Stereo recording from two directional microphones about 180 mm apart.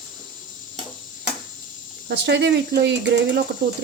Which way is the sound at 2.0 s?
70° right (ahead or behind).